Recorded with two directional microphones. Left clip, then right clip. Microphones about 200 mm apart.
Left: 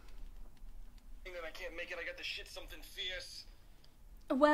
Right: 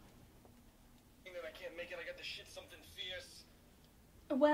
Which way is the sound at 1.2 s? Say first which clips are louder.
Left 2 dB; 25° left (ahead or behind).